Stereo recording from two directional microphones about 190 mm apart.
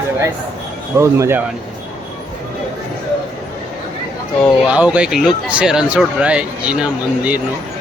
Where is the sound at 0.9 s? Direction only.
15° right (ahead or behind).